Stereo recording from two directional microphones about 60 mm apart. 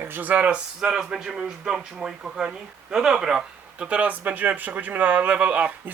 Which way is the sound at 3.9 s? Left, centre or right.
Right.